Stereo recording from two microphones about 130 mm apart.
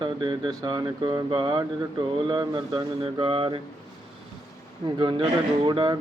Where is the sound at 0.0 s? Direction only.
40° right (ahead or behind).